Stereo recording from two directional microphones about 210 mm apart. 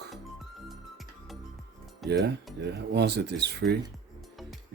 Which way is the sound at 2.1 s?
55° right (ahead or behind).